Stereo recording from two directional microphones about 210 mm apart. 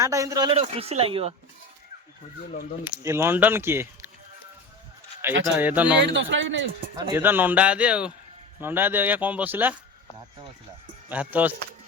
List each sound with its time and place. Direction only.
0.0 s speech: 15° right (ahead or behind)
0.5 s speech: 30° right (ahead or behind)
3.0 s speech: 10° right (ahead or behind)
5.2 s speech: 10° right (ahead or behind)
6.0 s a man's voice: 55° right (ahead or behind)
6.9 s speech: 15° right (ahead or behind)
11.1 s speech: 5° right (ahead or behind)